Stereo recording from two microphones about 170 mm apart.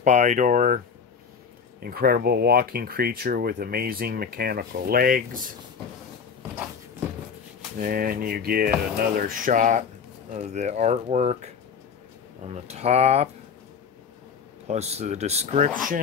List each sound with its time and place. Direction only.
0.0 s speech: 45° right (ahead or behind)
1.8 s speech: 65° right (ahead or behind)
7.8 s speech: 60° right (ahead or behind); by 13.3 s 40° right (ahead or behind)
14.7 s speech: 40° right (ahead or behind)